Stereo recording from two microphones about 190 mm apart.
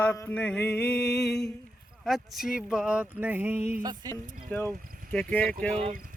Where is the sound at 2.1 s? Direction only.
Centre (ahead or behind).